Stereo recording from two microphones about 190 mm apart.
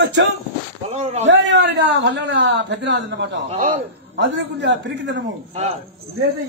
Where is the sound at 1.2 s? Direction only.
75° right (ahead or behind).